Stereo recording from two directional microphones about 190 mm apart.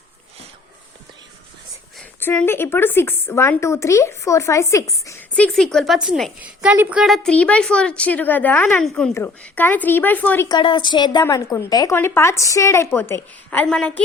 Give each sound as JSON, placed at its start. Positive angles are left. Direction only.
{"t": 2.2, "sound": "a woman's voice", "side_deg": 10}
{"t": 5.3, "sound": "a woman's voice", "side_deg": 5}
{"t": 10.6, "sound": "a woman's voice", "side_deg": 25}